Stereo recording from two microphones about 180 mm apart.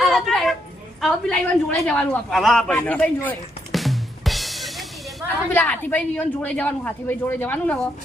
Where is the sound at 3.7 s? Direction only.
Centre (ahead or behind).